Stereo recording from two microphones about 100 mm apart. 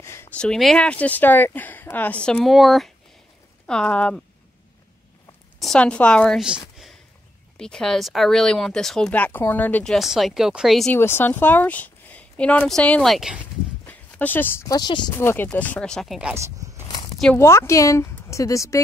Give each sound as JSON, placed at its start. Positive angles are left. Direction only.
{"t": 0.0, "sound": "a sound", "side_deg": 25}
{"t": 0.3, "sound": "speech", "side_deg": 10}
{"t": 2.4, "sound": "speech", "side_deg": 0}
{"t": 5.8, "sound": "speech", "side_deg": 10}
{"t": 7.5, "sound": "speech", "side_deg": 5}
{"t": 9.8, "sound": "speech", "side_deg": 0}
{"t": 10.9, "sound": "speech", "side_deg": 25}
{"t": 13.1, "sound": "speech", "side_deg": -5}
{"t": 13.8, "sound": "a sound", "side_deg": 20}
{"t": 14.7, "sound": "speech", "side_deg": 45}
{"t": 15.1, "sound": "speech", "side_deg": 20}
{"t": 16.3, "sound": "speech", "side_deg": -30}
{"t": 16.8, "sound": "a sound", "side_deg": 50}
{"t": 17.4, "sound": "speech", "side_deg": 30}